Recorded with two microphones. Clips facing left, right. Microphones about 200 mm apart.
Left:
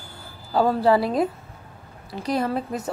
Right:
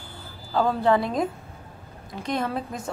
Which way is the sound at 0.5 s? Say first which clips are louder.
Left 3 dB; 5° left (ahead or behind).